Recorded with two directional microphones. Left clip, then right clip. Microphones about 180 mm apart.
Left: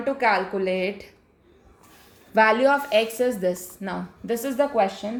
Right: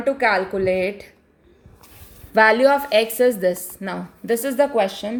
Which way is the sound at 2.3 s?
40° right (ahead or behind).